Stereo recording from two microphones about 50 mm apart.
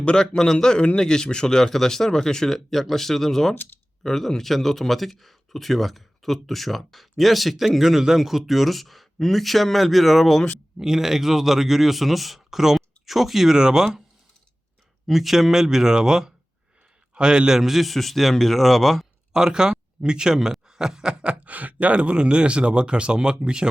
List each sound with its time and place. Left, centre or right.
0.0 s speech: centre
15.0 s speech: centre
17.6 s speech: centre
19.3 s speech: centre
21.4 s speech: right